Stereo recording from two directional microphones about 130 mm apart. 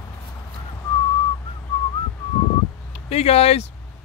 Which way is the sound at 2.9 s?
55° left (ahead or behind).